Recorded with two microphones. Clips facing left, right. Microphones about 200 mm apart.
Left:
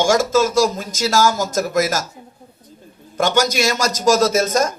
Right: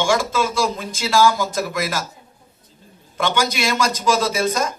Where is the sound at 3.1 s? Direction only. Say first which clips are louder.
Left 4 dB; 45° left (ahead or behind).